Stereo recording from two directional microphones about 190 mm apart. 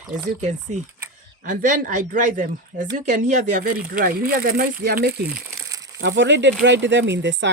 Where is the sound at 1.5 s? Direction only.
40° right (ahead or behind); by 5.3 s 55° right (ahead or behind).